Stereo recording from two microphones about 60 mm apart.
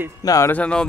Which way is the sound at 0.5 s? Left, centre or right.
Centre.